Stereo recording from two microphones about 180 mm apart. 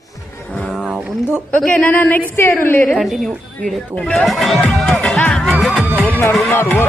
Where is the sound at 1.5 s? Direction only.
5° left (ahead or behind).